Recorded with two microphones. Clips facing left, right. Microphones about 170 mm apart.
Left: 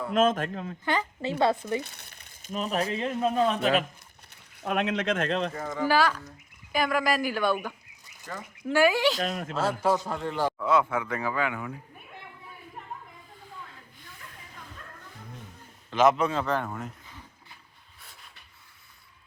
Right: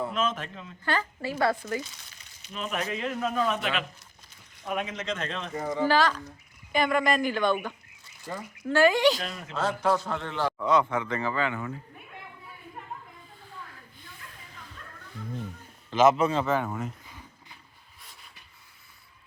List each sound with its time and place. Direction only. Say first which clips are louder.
0.1 s speech: left 6 dB; 50° left (ahead or behind)
0.9 s a man's voice: left 1 dB; 20° left (ahead or behind)
1.8 s speech: left 1 dB; 60° left (ahead or behind); by 2.8 s 35° left (ahead or behind)
2.9 s a man's voice: left 3 dB; 25° left (ahead or behind)
4.6 s speech: left 5 dB; 70° left (ahead or behind); by 5.4 s 55° left (ahead or behind)
5.5 s speech: right 3 dB; 20° right (ahead or behind)
5.8 s speech: even; 10° left (ahead or behind)
9.3 s speech: left 7 dB; 55° left (ahead or behind)
9.6 s a man's voice: even; 5° left (ahead or behind)
9.9 s speech: even; 15° left (ahead or behind)
15.9 s a man's voice: right 1 dB; centre (ahead or behind)